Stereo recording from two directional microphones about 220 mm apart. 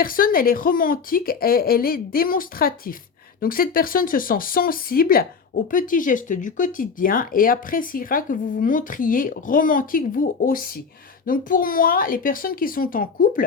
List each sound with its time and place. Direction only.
0.0 s speech: 40° left (ahead or behind)